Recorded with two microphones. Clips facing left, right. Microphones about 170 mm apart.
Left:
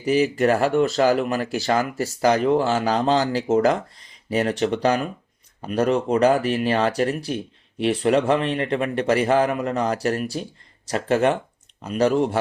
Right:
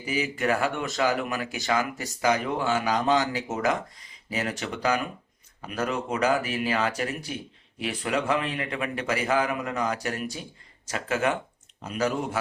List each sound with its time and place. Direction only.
0.0 s speech: 40° left (ahead or behind)